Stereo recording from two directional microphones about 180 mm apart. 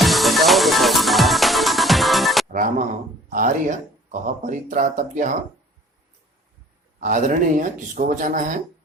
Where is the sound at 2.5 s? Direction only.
50° right (ahead or behind).